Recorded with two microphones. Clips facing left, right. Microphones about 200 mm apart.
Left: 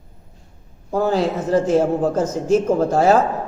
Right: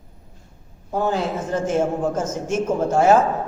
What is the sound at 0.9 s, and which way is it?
A man's voice, 35° left (ahead or behind).